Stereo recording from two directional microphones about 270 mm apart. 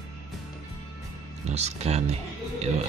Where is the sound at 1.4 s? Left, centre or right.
Right.